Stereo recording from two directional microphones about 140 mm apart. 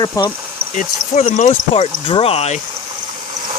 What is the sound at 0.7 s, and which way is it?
Speech, 60° left (ahead or behind).